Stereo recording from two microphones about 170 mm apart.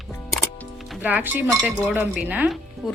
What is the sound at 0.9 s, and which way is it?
Speech, 10° right (ahead or behind).